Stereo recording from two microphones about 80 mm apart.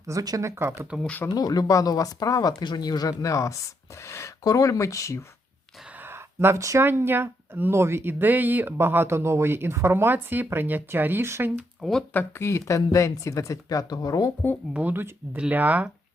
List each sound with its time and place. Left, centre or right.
0.1 s speech: right
0.5 s speech: right
1.3 s speech: left
6.0 s a sound: right
6.8 s speech: right
11.8 s speech: centre
12.1 s speech: left
14.7 s speech: right